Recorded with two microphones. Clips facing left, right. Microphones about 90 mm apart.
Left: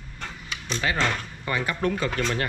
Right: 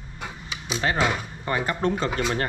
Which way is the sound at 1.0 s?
10° right (ahead or behind).